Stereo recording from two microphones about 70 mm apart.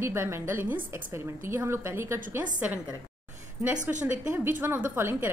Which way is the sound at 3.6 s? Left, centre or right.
Right.